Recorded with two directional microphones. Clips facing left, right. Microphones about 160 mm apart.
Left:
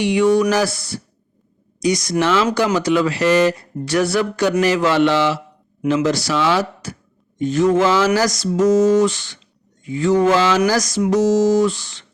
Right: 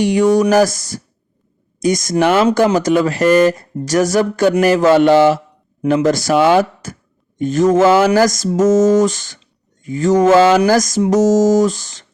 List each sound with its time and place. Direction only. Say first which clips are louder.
0.0 s speech: right 3 dB; 45° right (ahead or behind)